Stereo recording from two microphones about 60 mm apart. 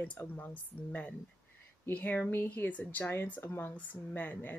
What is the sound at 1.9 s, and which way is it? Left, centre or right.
Speech, left.